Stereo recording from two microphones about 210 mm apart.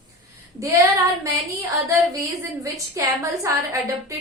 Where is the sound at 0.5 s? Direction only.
15° right (ahead or behind).